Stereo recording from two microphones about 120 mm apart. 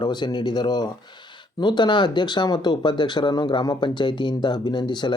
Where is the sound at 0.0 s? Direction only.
35° left (ahead or behind).